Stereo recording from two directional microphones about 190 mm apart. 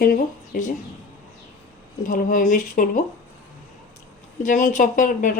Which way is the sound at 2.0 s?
45° left (ahead or behind).